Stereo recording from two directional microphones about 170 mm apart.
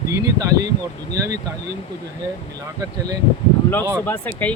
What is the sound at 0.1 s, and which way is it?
Speech, 20° right (ahead or behind).